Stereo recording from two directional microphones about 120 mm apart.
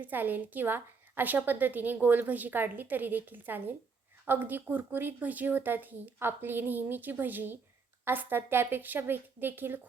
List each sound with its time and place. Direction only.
0.0 s a woman's voice: 15° right (ahead or behind)